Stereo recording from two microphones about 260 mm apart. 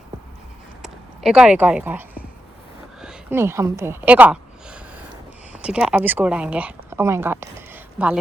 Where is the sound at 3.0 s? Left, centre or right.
Centre.